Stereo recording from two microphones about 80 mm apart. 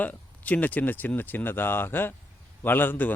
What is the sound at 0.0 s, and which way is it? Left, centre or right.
Speech, centre.